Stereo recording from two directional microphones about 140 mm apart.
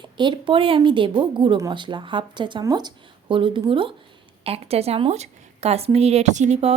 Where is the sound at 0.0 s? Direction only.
35° right (ahead or behind).